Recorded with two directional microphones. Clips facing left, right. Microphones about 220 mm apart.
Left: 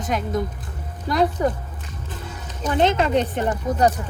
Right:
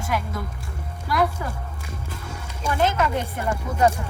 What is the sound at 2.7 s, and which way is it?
Speech, 25° left (ahead or behind).